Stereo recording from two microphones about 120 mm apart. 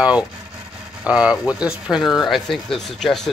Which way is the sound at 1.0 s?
10° right (ahead or behind).